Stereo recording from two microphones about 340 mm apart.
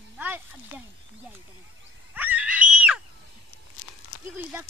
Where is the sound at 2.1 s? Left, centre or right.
Centre.